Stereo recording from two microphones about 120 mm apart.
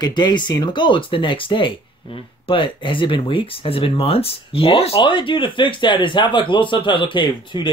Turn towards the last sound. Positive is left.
turn(degrees=40)  # may be behind; listen again after turning